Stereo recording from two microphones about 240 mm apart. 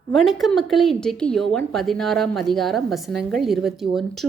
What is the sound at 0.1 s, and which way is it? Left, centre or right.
A woman's voice, centre.